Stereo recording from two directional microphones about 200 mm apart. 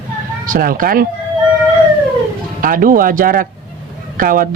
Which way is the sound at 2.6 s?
45° right (ahead or behind).